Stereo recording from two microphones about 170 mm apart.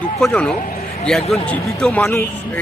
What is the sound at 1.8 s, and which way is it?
Speech, centre (ahead or behind).